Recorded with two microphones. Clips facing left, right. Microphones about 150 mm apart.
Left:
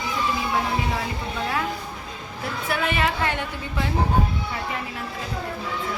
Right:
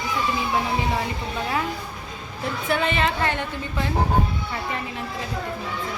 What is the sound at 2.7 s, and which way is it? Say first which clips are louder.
Speech: right 1 dB; 10° left (ahead or behind).